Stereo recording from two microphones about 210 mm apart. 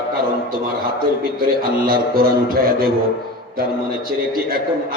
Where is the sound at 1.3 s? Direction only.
45° right (ahead or behind).